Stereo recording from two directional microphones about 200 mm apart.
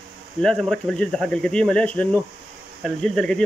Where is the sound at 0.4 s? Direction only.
5° left (ahead or behind).